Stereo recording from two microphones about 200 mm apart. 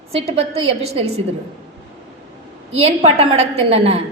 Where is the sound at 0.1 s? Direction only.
30° right (ahead or behind).